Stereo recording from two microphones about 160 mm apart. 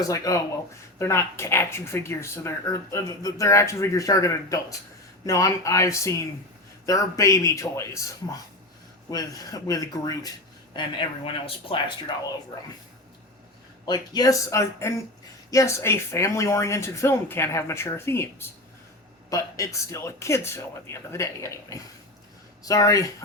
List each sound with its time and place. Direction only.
0.0 s speech: 20° left (ahead or behind)
10.8 s speech: 35° left (ahead or behind)
13.8 s speech: 25° left (ahead or behind)